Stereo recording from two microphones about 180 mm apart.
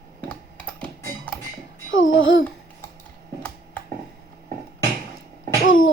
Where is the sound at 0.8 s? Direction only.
5° left (ahead or behind).